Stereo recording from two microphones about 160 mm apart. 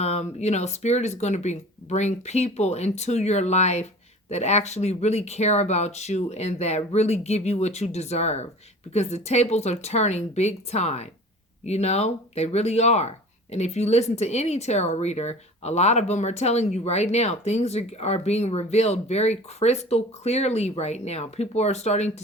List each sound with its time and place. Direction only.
0.0 s speech: 40° left (ahead or behind)